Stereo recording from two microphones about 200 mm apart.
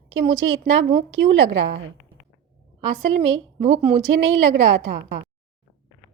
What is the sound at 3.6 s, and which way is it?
Speech, 35° right (ahead or behind).